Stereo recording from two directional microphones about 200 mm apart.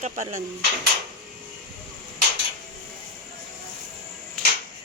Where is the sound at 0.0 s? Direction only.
35° right (ahead or behind).